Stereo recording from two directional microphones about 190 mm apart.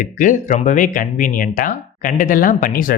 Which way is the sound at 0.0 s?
45° left (ahead or behind).